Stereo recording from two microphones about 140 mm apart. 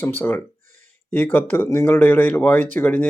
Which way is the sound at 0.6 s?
60° right (ahead or behind).